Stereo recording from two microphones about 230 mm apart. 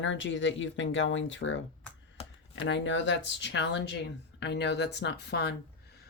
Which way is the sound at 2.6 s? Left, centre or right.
Left.